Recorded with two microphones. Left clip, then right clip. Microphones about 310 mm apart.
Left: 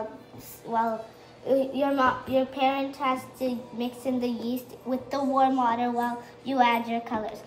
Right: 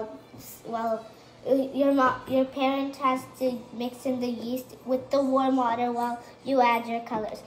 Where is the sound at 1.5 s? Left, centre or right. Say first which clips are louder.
Right 1 dB; centre.